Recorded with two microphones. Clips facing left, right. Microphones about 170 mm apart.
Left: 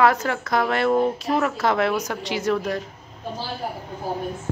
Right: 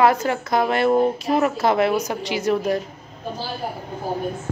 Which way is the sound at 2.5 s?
25° right (ahead or behind).